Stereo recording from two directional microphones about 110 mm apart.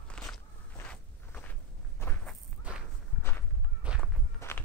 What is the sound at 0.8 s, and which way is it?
Walk, 15° left (ahead or behind).